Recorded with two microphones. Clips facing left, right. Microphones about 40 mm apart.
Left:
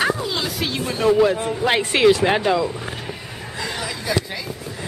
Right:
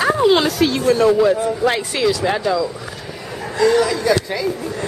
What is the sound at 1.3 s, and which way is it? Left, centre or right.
A man's voice, left.